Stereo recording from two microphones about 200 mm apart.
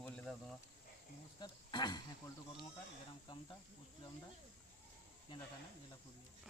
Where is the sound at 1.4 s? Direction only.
20° left (ahead or behind).